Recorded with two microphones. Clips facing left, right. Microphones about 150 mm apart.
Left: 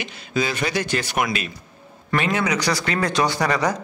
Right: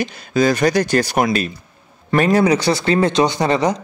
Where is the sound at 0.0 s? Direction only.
40° right (ahead or behind).